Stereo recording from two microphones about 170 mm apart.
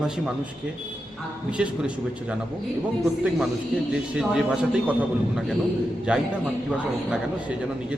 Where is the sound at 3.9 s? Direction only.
5° right (ahead or behind).